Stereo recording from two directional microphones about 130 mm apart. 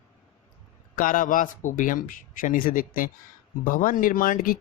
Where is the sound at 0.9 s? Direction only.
90° left.